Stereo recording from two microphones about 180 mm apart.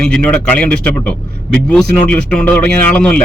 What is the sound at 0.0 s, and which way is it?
A man's voice, 5° left (ahead or behind).